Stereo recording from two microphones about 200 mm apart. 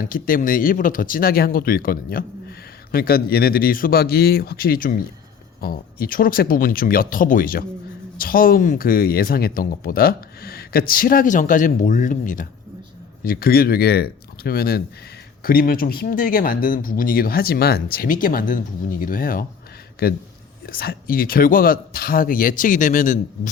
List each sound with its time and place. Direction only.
0.0 s speech: 45° left (ahead or behind)